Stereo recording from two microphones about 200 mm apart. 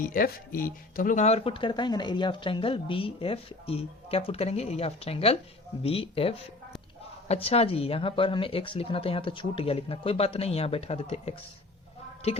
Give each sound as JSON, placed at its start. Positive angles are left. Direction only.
{"t": 0.0, "sound": "speech", "side_deg": 45}